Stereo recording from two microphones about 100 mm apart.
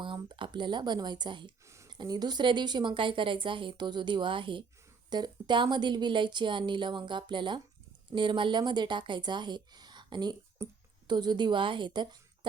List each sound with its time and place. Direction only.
0.0 s speech: 55° right (ahead or behind)